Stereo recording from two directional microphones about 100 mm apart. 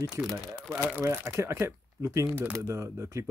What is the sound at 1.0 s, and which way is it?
Speech, 25° right (ahead or behind).